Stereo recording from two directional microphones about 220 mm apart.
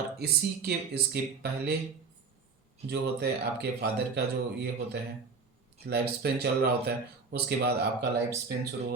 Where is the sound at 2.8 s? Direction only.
45° right (ahead or behind).